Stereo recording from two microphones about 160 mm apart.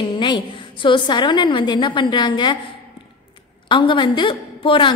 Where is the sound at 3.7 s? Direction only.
30° left (ahead or behind).